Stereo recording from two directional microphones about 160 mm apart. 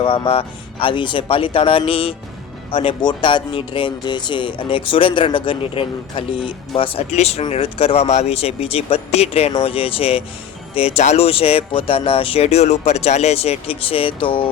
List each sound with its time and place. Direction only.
0.0 s speech: 35° left (ahead or behind)